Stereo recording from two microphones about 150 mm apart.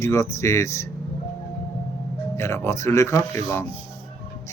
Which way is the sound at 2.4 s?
20° left (ahead or behind).